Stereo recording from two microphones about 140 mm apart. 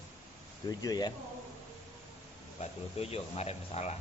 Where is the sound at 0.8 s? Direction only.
25° left (ahead or behind).